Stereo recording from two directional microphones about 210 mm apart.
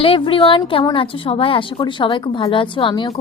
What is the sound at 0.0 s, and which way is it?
A woman's voice, 25° left (ahead or behind).